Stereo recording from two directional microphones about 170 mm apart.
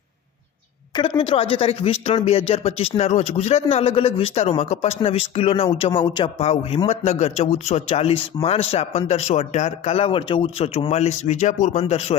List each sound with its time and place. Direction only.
0.9 s speech: 30° left (ahead or behind)